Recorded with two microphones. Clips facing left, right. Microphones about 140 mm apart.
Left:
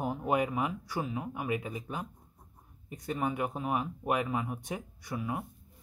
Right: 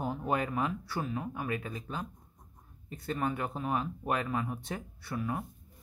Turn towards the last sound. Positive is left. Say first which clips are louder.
# even
turn(degrees=10)  # may be behind; listen again after turning